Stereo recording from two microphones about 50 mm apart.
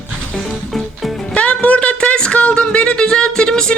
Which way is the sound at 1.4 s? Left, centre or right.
Left.